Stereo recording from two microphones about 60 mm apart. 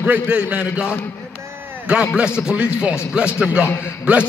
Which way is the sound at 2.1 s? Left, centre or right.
Centre.